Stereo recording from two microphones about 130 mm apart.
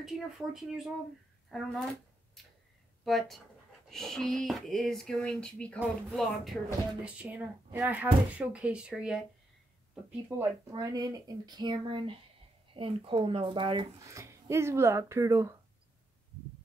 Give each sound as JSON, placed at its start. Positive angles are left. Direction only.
{"t": 0.0, "sound": "speech", "side_deg": -5}
{"t": 2.4, "sound": "tick-tock", "side_deg": 0}
{"t": 3.1, "sound": "speech", "side_deg": 0}
{"t": 10.3, "sound": "speech", "side_deg": -15}
{"t": 10.8, "sound": "speech", "side_deg": -30}
{"t": 14.0, "sound": "speech", "side_deg": -20}